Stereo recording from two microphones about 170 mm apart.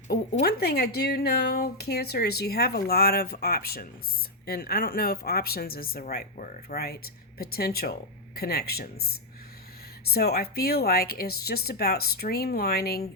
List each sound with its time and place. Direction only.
0.4 s speech: 65° left (ahead or behind)